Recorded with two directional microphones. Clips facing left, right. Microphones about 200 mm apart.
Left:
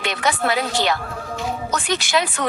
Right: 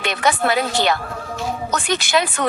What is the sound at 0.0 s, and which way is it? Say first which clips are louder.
A woman's voice: right 2 dB; 55° right (ahead or behind).